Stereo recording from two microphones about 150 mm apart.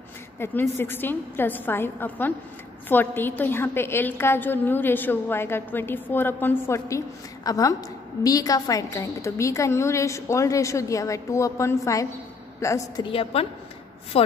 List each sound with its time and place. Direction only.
0.4 s a woman's voice: 15° left (ahead or behind)
13.0 s a woman's voice: 35° left (ahead or behind)